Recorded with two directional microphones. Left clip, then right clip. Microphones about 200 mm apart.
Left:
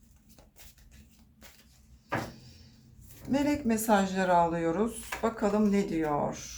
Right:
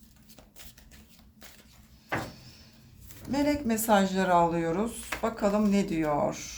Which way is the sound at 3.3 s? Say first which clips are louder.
Right 1 dB; 30° right (ahead or behind).